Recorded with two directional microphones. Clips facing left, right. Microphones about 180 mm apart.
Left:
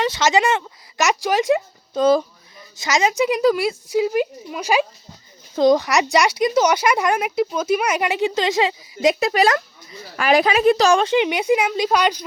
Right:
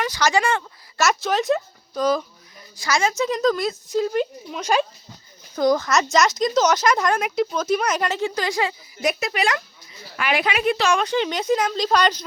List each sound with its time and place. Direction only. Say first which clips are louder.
0.0 s speech: left 3 dB; 25° left (ahead or behind)
1.9 s speech: left 5 dB; 25° left (ahead or behind); by 4.9 s 10° left (ahead or behind)
5.5 s speech: left 3 dB; 20° left (ahead or behind)
9.2 s a woman's voice: left 6 dB; 35° left (ahead or behind)
11.1 s speech: left 4 dB; 15° left (ahead or behind)